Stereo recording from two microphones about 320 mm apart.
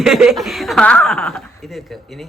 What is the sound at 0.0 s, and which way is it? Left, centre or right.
Speech, centre.